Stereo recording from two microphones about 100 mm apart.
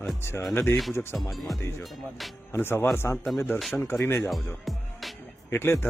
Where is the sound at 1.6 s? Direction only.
25° left (ahead or behind).